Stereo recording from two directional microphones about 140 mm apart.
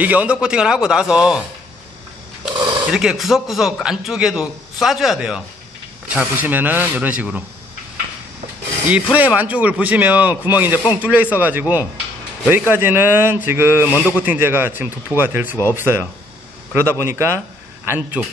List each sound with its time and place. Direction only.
0.0 s a man's voice: 10° right (ahead or behind)
2.5 s a sound: 35° right (ahead or behind)
2.9 s a man's voice: 5° right (ahead or behind)
9.1 s speech: 10° right (ahead or behind)